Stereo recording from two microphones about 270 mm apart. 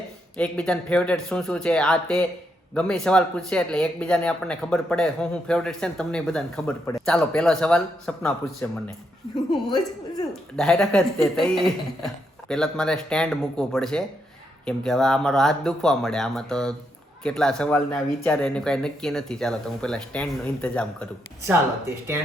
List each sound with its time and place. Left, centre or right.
0.3 s speech: centre
10.6 s speech: centre
21.4 s speech: centre